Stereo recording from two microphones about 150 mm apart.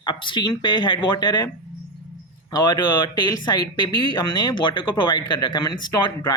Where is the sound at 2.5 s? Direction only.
30° left (ahead or behind).